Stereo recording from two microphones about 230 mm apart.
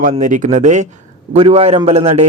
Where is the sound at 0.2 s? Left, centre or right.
Right.